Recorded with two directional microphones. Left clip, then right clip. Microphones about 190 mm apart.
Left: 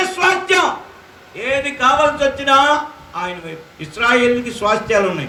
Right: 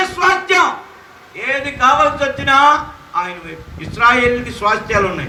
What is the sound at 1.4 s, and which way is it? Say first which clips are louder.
A man's voice: right 1 dB; 35° left (ahead or behind).